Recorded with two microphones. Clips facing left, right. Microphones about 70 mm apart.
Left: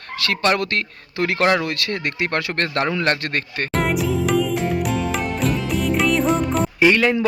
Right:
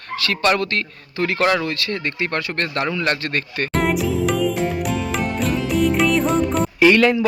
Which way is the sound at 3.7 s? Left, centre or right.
Centre.